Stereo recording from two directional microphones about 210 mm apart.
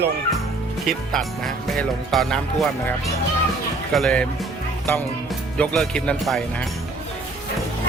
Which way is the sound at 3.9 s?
5° left (ahead or behind).